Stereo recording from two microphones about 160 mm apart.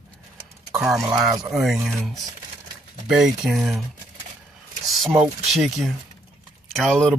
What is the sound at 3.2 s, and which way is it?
Speech, centre (ahead or behind).